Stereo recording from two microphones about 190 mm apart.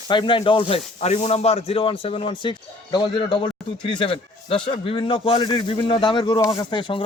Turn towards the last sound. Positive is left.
turn(degrees=25)  # may be behind; listen again after turning